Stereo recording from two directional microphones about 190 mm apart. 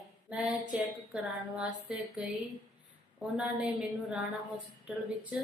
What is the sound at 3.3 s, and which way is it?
Speech, 5° right (ahead or behind).